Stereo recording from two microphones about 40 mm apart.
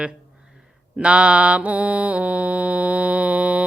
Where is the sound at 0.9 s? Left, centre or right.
Right.